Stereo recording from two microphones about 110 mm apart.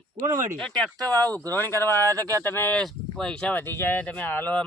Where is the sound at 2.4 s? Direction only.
20° left (ahead or behind).